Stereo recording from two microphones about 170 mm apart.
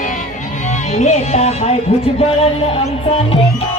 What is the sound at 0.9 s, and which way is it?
Speech, 40° left (ahead or behind).